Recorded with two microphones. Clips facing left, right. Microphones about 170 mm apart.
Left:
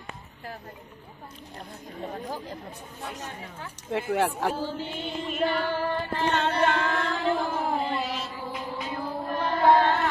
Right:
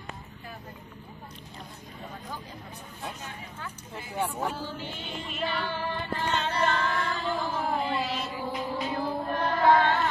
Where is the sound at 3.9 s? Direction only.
75° left (ahead or behind).